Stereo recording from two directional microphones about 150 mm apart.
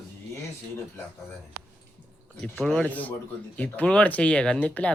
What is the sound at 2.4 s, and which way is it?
A man's voice, 5° left (ahead or behind).